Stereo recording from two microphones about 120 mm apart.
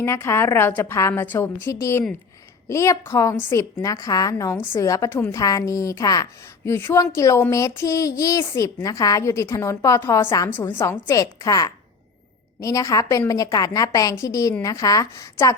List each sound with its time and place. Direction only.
0.0 s speech: 20° left (ahead or behind)
6.7 s a woman's voice: 20° left (ahead or behind)
10.8 s speech: 20° left (ahead or behind)